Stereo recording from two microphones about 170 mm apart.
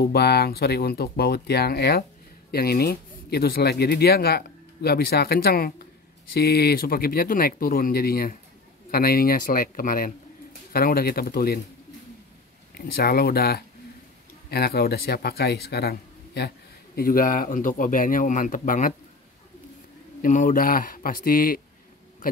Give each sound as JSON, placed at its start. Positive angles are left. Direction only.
{"t": 0.0, "sound": "speech", "side_deg": 70}
{"t": 12.7, "sound": "speech", "side_deg": 65}
{"t": 20.2, "sound": "speech", "side_deg": 50}